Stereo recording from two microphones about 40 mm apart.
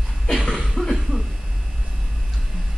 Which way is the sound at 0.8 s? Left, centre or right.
Left.